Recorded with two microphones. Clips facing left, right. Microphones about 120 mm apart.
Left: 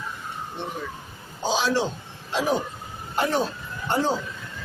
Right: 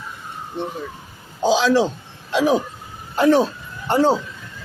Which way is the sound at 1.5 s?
90° right.